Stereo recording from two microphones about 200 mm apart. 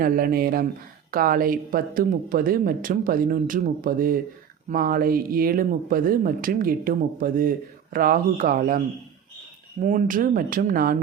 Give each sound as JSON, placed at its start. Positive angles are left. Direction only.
{"t": 0.0, "sound": "speech", "side_deg": -45}
{"t": 9.8, "sound": "speech", "side_deg": -40}